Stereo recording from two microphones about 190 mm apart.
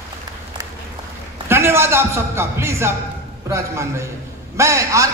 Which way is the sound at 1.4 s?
15° right (ahead or behind).